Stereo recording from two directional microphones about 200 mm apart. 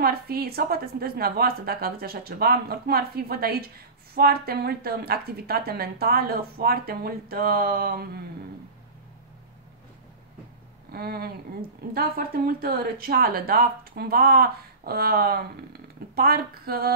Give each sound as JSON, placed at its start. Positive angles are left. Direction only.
{"t": 0.0, "sound": "a woman's voice", "side_deg": -50}
{"t": 10.9, "sound": "a woman's voice", "side_deg": -50}